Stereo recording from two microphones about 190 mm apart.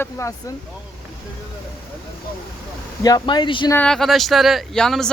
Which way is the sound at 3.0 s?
20° left (ahead or behind).